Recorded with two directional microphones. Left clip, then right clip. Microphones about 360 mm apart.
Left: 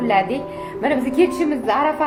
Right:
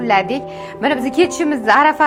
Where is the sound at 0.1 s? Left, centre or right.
Right.